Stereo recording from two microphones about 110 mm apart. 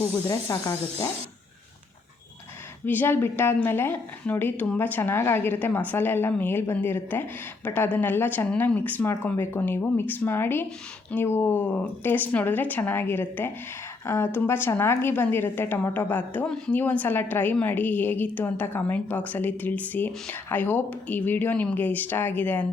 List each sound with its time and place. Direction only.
0.5 s speech: 35° left (ahead or behind)
2.8 s a woman's voice: 20° left (ahead or behind)